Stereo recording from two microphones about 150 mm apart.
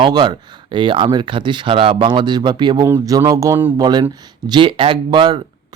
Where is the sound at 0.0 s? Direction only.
30° right (ahead or behind).